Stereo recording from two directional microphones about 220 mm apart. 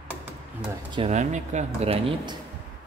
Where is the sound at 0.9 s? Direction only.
30° right (ahead or behind).